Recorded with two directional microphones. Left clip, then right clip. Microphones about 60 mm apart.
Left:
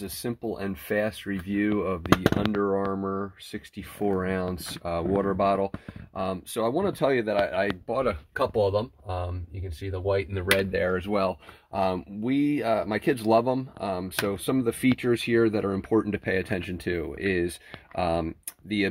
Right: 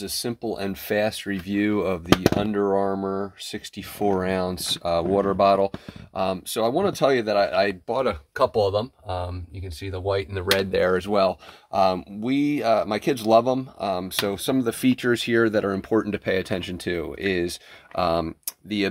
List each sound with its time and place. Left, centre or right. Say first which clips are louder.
0.0 s speech: right 5 dB; right
0.4 s speech: right 4 dB; right
2.5 s speech: right 4 dB; right
5.5 s speech: right 6 dB; right
8.4 s speech: right 4 dB; centre
10.7 s speech: right 5 dB; right
11.1 s speech: right 5 dB; right
11.7 s speech: right 6 dB; right